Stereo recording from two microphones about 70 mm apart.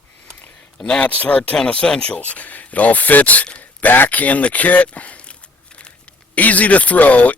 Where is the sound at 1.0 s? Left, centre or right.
Left.